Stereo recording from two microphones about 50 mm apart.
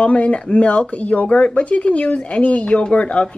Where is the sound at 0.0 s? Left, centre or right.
Left.